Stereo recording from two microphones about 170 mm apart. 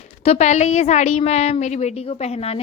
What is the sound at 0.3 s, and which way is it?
A woman's voice, 40° left (ahead or behind).